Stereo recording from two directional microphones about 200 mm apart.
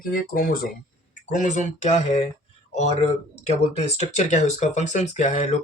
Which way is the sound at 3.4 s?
35° left (ahead or behind).